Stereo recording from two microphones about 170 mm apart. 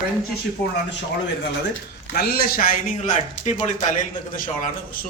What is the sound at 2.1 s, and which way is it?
Speech, 65° left (ahead or behind).